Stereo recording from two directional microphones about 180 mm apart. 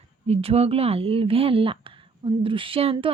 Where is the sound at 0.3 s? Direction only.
35° right (ahead or behind).